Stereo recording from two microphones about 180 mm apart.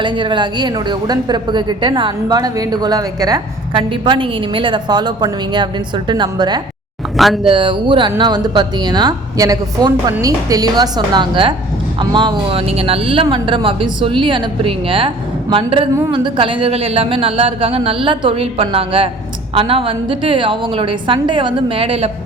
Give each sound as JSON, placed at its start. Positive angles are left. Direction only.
{"t": 0.0, "sound": "a woman's voice", "side_deg": -25}